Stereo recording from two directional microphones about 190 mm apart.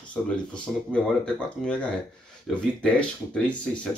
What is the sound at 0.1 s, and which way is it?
Speech, 5° left (ahead or behind).